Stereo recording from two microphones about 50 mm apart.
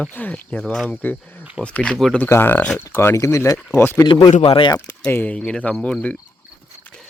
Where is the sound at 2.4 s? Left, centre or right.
Left.